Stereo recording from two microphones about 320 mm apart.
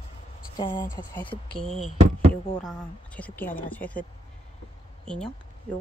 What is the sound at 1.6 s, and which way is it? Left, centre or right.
A woman's voice, centre.